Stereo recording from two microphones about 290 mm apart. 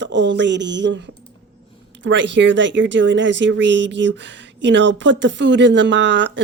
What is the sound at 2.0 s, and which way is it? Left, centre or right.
Speech, right.